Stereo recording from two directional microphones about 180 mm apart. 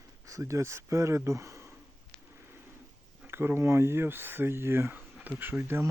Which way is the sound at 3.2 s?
10° right (ahead or behind).